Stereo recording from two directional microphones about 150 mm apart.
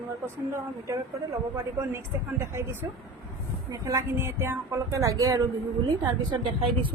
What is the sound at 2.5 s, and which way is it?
Speech, 15° right (ahead or behind).